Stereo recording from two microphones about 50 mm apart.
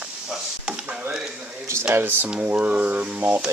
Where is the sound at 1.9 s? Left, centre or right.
Right.